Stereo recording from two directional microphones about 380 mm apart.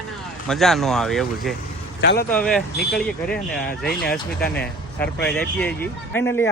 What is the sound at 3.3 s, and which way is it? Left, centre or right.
Speech, left.